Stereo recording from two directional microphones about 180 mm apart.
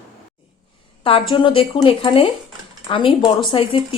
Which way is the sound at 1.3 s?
25° left (ahead or behind).